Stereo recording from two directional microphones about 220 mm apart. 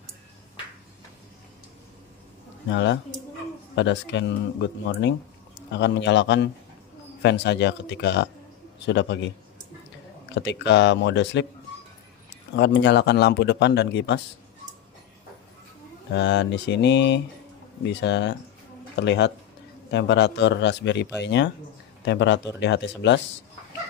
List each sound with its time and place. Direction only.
2.7 s speech: 55° left (ahead or behind)
10.3 s speech: 55° left (ahead or behind)
12.5 s speech: 50° left (ahead or behind)
16.1 s speech: 50° left (ahead or behind)